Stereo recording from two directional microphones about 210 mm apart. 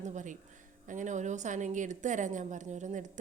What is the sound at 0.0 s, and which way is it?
A woman's voice, 35° right (ahead or behind).